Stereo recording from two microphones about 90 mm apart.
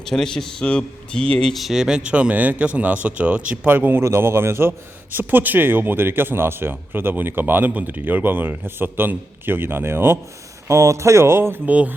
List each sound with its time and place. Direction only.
0.0 s speech: 5° left (ahead or behind); by 11.9 s 15° right (ahead or behind)